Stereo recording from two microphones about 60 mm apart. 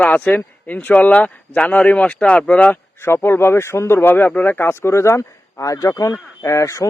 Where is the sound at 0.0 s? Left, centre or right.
Left.